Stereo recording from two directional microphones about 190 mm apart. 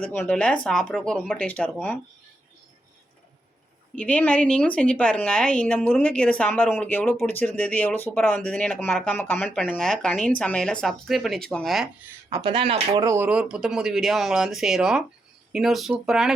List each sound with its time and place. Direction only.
0.0 s speech: 10° left (ahead or behind)
3.9 s a woman's voice: 5° left (ahead or behind)
12.3 s speech: 25° right (ahead or behind)
13.1 s speech: 10° right (ahead or behind)